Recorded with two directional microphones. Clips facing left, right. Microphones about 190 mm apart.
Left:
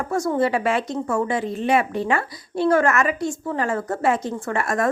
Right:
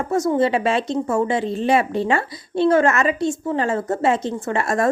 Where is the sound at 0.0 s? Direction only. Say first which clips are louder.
Right 3 dB; 20° right (ahead or behind).